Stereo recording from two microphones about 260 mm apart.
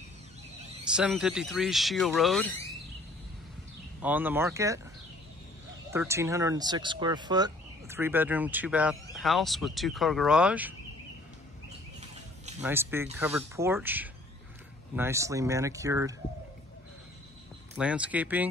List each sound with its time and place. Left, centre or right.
0.9 s speech: centre
4.0 s speech: centre
5.9 s speech: centre
12.0 s a sound: right
12.6 s speech: centre
17.7 s speech: centre